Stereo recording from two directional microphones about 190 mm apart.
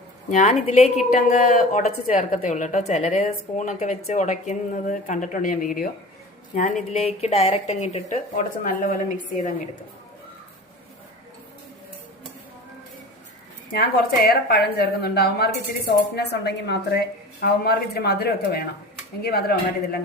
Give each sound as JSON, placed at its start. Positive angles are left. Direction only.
{"t": 0.3, "sound": "a woman's voice", "side_deg": 40}
{"t": 13.7, "sound": "a woman's voice", "side_deg": 55}